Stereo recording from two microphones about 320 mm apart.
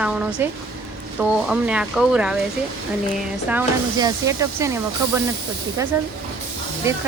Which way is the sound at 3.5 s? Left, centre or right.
Centre.